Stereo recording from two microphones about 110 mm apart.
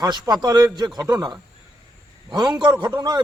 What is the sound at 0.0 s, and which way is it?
A man's voice, 35° right (ahead or behind).